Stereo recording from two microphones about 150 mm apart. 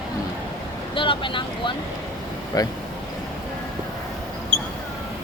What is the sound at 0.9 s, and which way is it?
Speech, 35° left (ahead or behind).